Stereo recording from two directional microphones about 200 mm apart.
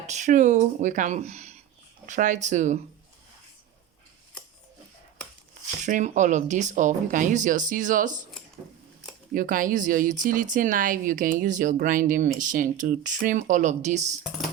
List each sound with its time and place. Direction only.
0.1 s speech: 35° right (ahead or behind)
5.8 s speech: 35° right (ahead or behind)
9.3 s speech: 45° right (ahead or behind)